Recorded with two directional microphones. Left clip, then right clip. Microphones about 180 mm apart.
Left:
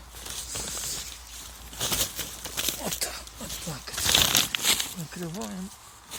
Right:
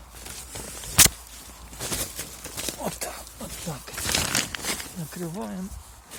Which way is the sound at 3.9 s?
35° right (ahead or behind).